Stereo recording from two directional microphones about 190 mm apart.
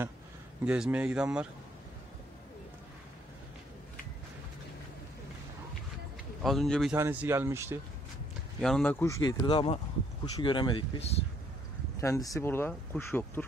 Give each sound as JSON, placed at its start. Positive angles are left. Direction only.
{"t": 0.7, "sound": "speech", "side_deg": -5}
{"t": 6.4, "sound": "speech", "side_deg": 0}
{"t": 7.0, "sound": "speech", "side_deg": -10}
{"t": 8.5, "sound": "speech", "side_deg": 5}
{"t": 9.0, "sound": "speech", "side_deg": 15}